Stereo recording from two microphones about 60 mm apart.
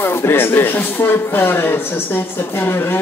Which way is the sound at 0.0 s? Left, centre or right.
Left.